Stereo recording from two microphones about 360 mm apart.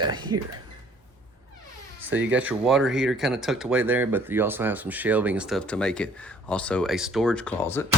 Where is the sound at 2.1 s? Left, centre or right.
Right.